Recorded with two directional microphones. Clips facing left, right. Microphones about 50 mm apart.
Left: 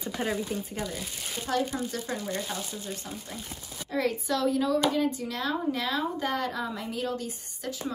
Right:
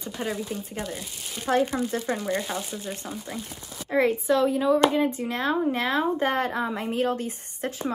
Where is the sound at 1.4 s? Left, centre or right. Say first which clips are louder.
Right 6 dB; right.